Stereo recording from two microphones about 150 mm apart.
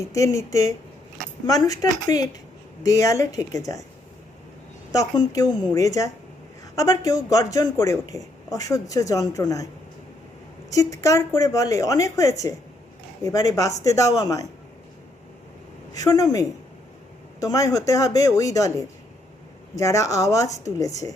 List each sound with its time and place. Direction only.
0.1 s speech: 20° left (ahead or behind)
4.9 s speech: 25° left (ahead or behind)
10.7 s speech: 20° left (ahead or behind)
16.0 s speech: 25° left (ahead or behind)
19.7 s speech: 20° left (ahead or behind)